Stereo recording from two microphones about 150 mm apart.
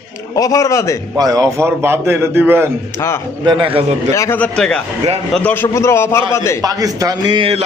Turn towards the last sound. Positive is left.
turn(degrees=-35)  # may be behind; listen again after turning